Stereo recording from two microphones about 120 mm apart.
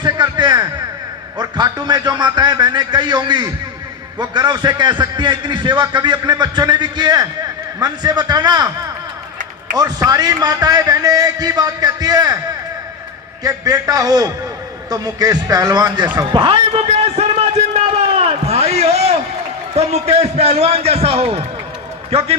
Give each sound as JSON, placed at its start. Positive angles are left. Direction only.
{"t": 0.0, "sound": "a sound", "side_deg": -40}
{"t": 1.4, "sound": "a man's voice", "side_deg": -35}
{"t": 9.7, "sound": "a man's voice", "side_deg": -35}
{"t": 13.4, "sound": "a man's voice", "side_deg": -30}
{"t": 16.1, "sound": "a sound", "side_deg": -40}
{"t": 19.7, "sound": "a man's voice", "side_deg": -60}